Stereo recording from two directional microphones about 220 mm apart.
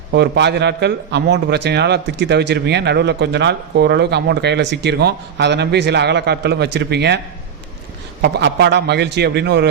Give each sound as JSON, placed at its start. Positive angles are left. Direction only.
{"t": 0.1, "sound": "a man's voice", "side_deg": -50}
{"t": 8.2, "sound": "a man's voice", "side_deg": -50}